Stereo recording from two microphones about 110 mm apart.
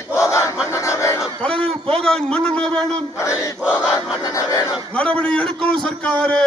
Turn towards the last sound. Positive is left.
turn(degrees=10)  # may be behind; listen again after turning